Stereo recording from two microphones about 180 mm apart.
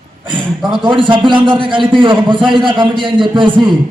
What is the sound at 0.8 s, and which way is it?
A man's voice, 25° right (ahead or behind).